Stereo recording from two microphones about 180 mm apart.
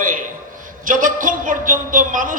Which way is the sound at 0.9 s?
50° right (ahead or behind).